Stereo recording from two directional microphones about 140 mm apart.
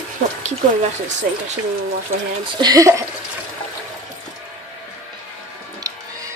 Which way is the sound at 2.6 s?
25° right (ahead or behind).